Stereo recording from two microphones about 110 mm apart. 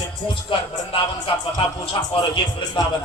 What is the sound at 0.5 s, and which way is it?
Speech, 50° left (ahead or behind).